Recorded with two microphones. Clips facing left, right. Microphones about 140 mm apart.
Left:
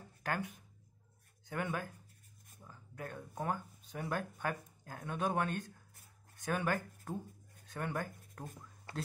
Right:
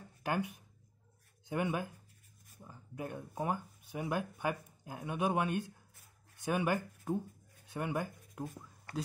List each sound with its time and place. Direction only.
0.2 s speech: 15° right (ahead or behind)